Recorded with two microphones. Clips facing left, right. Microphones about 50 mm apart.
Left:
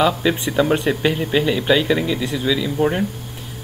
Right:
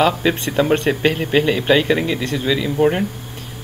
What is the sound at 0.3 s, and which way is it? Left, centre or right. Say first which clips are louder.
Speech: right 1 dB; centre.